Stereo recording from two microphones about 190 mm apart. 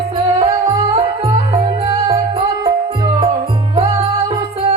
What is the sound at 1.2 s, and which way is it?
Music, 25° right (ahead or behind).